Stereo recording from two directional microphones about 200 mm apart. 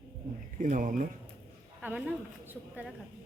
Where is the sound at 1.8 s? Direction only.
5° right (ahead or behind).